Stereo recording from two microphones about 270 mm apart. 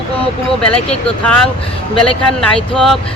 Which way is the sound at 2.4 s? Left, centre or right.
Centre.